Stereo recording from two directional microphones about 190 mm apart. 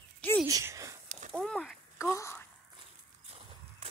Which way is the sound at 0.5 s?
15° right (ahead or behind).